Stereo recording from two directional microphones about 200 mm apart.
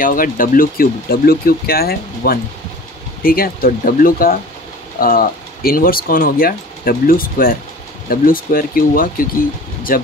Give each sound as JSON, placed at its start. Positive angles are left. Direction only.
{"t": 0.0, "sound": "speech", "side_deg": 45}